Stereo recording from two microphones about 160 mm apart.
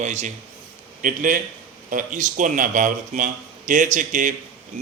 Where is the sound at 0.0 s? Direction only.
45° right (ahead or behind).